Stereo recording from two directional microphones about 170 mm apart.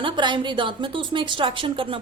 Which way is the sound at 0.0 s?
30° right (ahead or behind).